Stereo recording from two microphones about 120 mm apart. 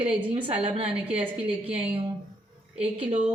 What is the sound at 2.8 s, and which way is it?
Speech, 45° right (ahead or behind).